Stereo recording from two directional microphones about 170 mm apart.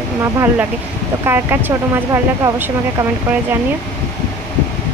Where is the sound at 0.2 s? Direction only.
15° right (ahead or behind).